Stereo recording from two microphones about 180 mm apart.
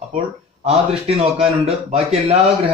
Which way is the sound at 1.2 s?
35° right (ahead or behind).